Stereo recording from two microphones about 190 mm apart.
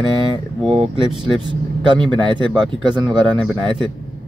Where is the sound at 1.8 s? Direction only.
25° right (ahead or behind).